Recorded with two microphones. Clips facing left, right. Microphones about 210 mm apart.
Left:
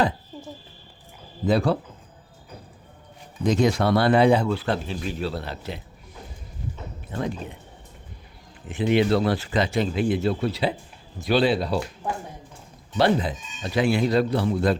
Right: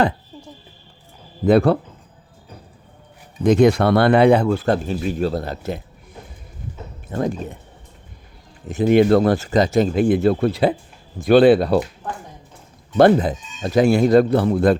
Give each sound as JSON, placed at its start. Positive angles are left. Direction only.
{"t": 1.5, "sound": "speech", "side_deg": -55}
{"t": 3.4, "sound": "speech", "side_deg": -55}
{"t": 7.1, "sound": "speech", "side_deg": -45}
{"t": 8.6, "sound": "speech", "side_deg": -40}
{"t": 13.0, "sound": "speech", "side_deg": -45}